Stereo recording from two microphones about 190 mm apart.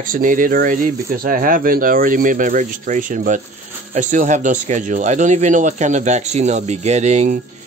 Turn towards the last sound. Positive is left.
turn(degrees=-40)  # may be behind; listen again after turning